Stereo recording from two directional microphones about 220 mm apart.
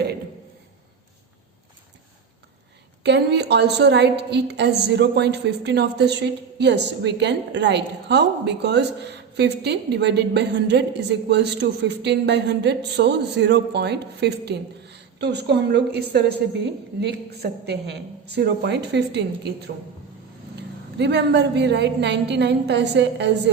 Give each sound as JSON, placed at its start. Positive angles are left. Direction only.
{"t": 3.0, "sound": "a woman's voice", "side_deg": -50}
{"t": 21.0, "sound": "a woman's voice", "side_deg": -50}